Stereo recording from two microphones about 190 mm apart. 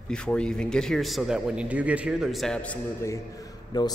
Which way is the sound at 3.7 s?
20° left (ahead or behind).